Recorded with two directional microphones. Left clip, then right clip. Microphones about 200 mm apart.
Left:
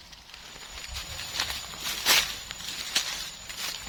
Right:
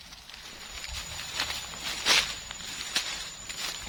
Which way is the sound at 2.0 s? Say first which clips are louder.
Left 1 dB; 40° left (ahead or behind).